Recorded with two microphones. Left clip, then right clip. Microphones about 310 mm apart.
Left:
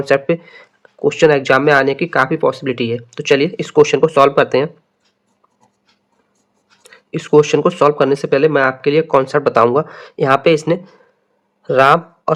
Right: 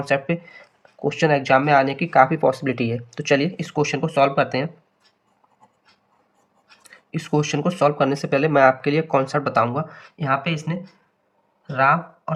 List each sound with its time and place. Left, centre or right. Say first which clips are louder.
0.0 s speech: left 8 dB; centre
6.8 s speech: left 8 dB; centre
11.8 s speech: left 7 dB; centre